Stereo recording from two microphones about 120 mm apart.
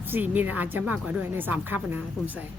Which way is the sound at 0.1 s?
15° right (ahead or behind).